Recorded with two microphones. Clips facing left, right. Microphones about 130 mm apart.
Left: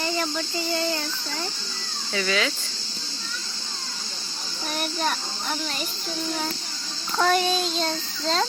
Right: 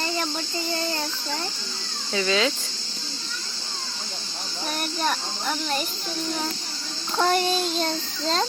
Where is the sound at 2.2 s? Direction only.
25° right (ahead or behind).